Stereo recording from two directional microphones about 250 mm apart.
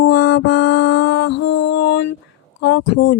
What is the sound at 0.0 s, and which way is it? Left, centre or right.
Music, left.